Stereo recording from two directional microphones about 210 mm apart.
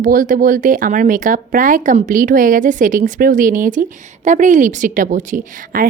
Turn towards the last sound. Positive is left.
turn(degrees=-40)  # may be behind; listen again after turning